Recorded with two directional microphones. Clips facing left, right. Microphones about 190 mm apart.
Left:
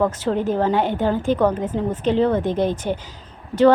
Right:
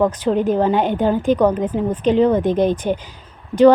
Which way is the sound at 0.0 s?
15° right (ahead or behind).